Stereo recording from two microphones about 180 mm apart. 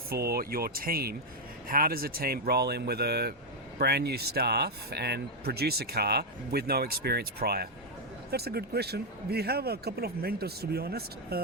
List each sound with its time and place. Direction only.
0.1 s speech: 60° right (ahead or behind)